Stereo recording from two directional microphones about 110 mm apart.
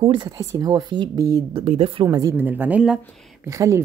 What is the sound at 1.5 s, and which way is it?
Speech, 60° right (ahead or behind).